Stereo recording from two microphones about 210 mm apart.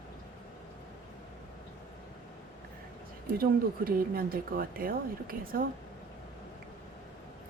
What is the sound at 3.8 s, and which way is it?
A woman's voice, 45° right (ahead or behind).